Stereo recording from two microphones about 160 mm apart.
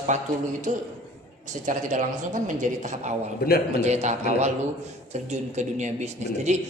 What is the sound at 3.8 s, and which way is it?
Speech, 45° right (ahead or behind).